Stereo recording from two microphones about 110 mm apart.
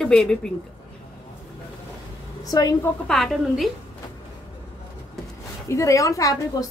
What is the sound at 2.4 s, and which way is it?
Speech, 35° left (ahead or behind).